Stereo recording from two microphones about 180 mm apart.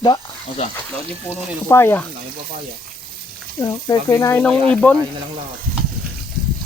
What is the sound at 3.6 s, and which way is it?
Speech, 20° left (ahead or behind).